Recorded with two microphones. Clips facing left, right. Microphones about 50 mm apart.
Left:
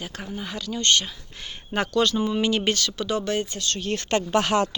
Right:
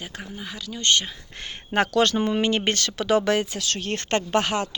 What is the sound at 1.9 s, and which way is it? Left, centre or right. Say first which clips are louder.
Speech: left 1 dB; right.